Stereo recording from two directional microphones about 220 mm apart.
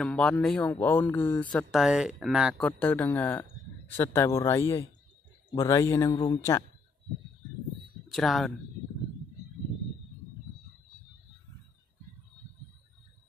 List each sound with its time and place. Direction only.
0.0 s speech: 5° left (ahead or behind)
8.1 s speech: centre (ahead or behind)